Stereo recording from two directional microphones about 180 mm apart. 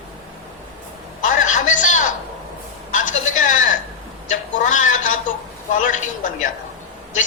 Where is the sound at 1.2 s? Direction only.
45° left (ahead or behind).